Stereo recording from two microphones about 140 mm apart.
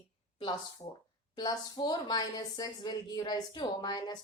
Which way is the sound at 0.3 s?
30° left (ahead or behind).